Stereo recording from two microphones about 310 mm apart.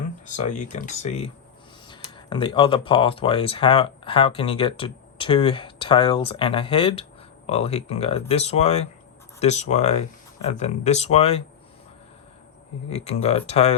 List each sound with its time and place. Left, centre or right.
0.7 s speech: left
12.9 s speech: centre